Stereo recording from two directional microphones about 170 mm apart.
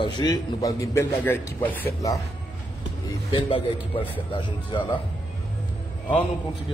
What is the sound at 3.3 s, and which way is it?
A man's voice, 30° left (ahead or behind).